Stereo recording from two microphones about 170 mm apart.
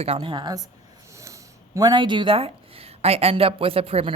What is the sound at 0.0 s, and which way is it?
Speech, 30° right (ahead or behind).